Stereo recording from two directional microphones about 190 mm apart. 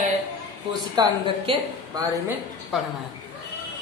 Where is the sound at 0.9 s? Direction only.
25° right (ahead or behind).